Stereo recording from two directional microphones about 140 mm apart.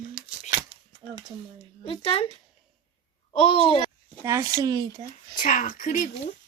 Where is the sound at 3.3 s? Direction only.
40° left (ahead or behind).